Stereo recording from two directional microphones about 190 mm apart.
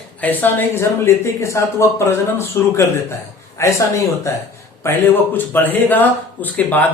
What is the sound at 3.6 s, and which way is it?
Speech, 15° left (ahead or behind).